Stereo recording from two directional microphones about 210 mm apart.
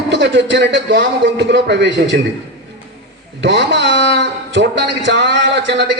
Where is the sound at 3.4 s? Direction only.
55° right (ahead or behind).